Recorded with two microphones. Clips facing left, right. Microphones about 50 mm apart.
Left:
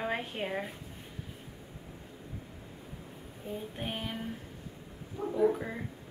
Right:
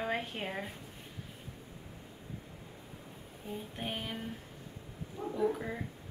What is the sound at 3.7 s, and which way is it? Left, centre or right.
Speech, centre.